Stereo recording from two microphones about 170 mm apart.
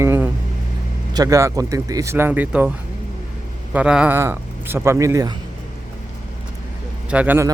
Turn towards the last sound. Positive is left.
turn(degrees=-10)  # may be behind; listen again after turning